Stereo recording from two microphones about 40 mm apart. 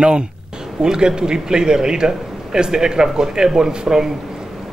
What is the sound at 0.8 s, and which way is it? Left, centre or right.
A man's voice, centre.